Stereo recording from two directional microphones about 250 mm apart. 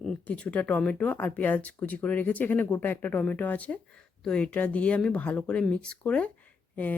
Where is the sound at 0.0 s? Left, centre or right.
Centre.